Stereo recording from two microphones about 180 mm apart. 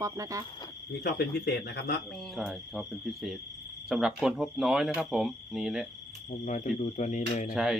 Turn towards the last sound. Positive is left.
turn(degrees=45)  # may be behind; listen again after turning